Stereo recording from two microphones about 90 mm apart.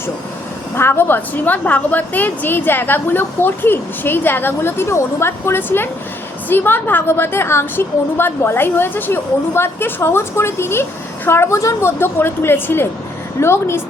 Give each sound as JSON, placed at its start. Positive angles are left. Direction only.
{"t": 0.8, "sound": "a woman's voice", "side_deg": 25}